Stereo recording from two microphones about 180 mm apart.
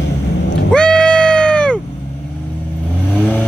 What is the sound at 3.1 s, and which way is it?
Vehicle, 10° left (ahead or behind).